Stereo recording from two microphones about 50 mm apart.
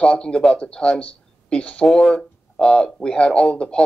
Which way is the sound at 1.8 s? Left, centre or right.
Centre.